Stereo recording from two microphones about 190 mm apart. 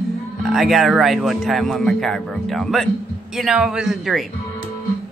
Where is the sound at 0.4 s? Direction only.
Centre (ahead or behind).